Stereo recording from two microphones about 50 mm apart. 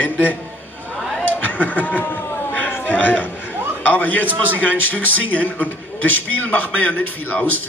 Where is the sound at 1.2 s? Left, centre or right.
Left.